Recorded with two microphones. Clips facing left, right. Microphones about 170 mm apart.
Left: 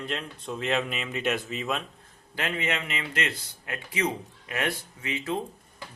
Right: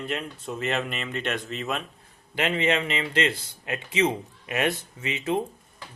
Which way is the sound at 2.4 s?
25° right (ahead or behind).